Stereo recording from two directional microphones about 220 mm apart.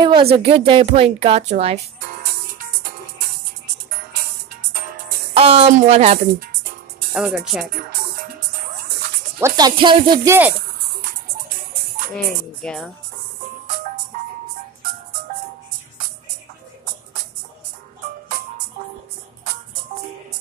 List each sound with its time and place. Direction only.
0.0 s a woman's voice: 25° right (ahead or behind)
5.3 s a woman's voice: 25° right (ahead or behind)
7.1 s speech: 5° right (ahead or behind)
8.7 s music: 40° right (ahead or behind)
9.4 s speech: 20° right (ahead or behind)
12.6 s speech: centre (ahead or behind)